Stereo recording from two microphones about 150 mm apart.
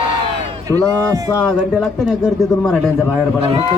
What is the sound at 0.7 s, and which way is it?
Speech, 25° right (ahead or behind).